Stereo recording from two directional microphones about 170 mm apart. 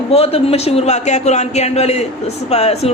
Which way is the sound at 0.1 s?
35° left (ahead or behind).